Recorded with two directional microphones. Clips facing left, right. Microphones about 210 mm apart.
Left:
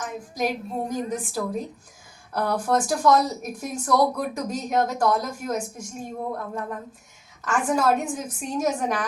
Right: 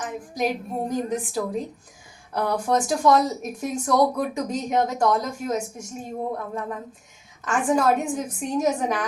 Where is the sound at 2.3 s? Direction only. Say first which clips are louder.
Even; 20° right (ahead or behind).